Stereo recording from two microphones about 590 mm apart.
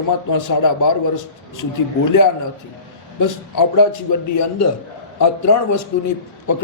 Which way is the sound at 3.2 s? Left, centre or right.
Left.